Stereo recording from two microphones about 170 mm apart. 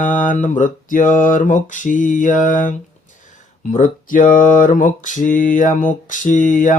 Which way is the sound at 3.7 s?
50° left (ahead or behind).